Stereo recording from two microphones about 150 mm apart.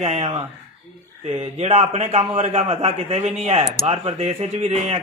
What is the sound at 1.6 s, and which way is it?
A man's voice, 45° right (ahead or behind).